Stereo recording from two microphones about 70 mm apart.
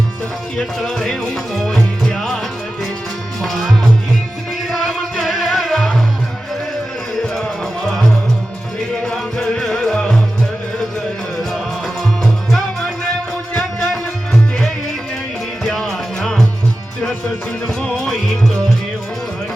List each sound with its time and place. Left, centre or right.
0.5 s music: centre
3.4 s music: centre
9.0 s music: centre
12.2 s music: centre
13.5 s music: centre
13.8 s music: centre